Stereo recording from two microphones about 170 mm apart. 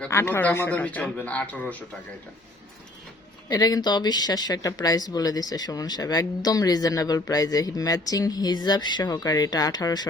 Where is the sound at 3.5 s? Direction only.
20° left (ahead or behind).